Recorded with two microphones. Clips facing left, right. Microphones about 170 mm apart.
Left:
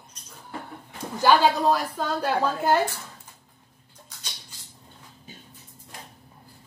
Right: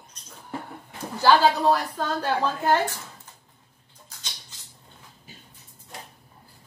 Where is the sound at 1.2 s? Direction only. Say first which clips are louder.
Even; 15° left (ahead or behind).